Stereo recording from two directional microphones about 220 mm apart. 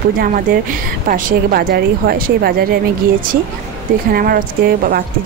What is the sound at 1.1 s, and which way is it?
A woman's voice, 40° right (ahead or behind).